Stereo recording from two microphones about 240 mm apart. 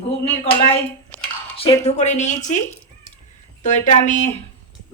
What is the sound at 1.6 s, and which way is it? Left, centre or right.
Speech, left.